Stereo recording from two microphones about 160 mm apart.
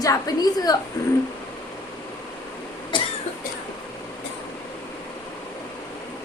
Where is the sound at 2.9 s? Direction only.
30° left (ahead or behind).